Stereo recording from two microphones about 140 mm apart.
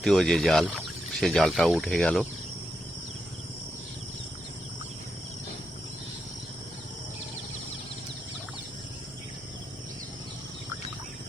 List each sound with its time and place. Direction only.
0.0 s speech: 5° left (ahead or behind)